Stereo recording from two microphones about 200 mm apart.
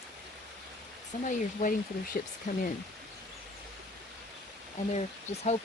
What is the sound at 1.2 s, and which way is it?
Speech, 40° left (ahead or behind).